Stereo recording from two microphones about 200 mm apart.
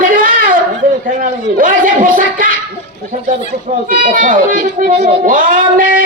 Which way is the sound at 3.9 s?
45° right (ahead or behind).